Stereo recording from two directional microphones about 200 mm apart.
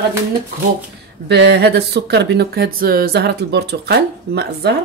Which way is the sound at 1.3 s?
55° right (ahead or behind).